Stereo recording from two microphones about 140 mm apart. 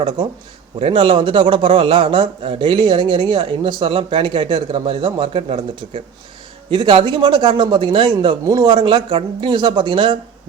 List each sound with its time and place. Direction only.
0.8 s speech: 40° right (ahead or behind)
6.7 s speech: 35° right (ahead or behind)